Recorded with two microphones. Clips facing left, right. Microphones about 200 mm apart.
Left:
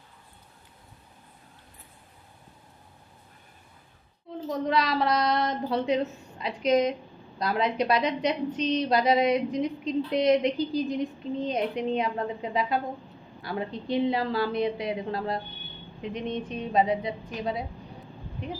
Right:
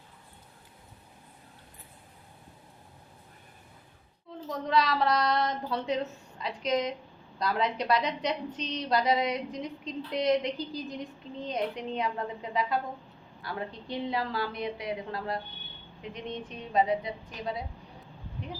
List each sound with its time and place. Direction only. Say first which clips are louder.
4.4 s a woman's voice: left 1 dB; 15° left (ahead or behind)